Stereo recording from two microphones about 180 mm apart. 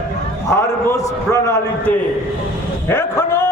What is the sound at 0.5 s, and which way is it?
A man's voice, 15° left (ahead or behind).